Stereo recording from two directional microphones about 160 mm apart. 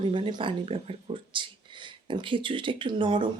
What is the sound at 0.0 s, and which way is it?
Speech, 30° right (ahead or behind).